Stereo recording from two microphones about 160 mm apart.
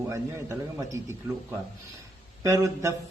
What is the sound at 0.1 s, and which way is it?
Speech, 20° right (ahead or behind).